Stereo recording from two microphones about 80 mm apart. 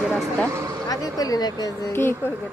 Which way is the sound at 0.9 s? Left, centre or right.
Left.